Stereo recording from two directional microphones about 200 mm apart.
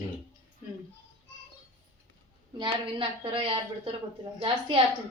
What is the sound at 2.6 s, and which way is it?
A woman's voice, 25° right (ahead or behind).